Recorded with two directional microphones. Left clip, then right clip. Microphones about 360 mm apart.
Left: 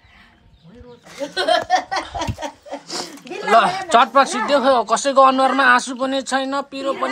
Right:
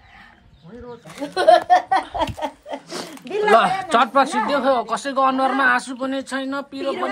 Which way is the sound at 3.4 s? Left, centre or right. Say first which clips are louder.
Left 1 dB; centre.